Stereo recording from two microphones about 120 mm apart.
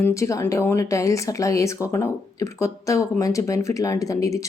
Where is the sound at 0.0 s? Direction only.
25° left (ahead or behind).